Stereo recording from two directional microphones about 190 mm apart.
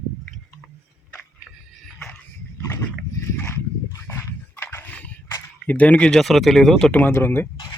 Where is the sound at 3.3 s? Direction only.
15° left (ahead or behind).